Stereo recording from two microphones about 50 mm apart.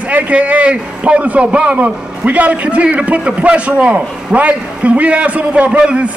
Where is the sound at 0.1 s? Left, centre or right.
Right.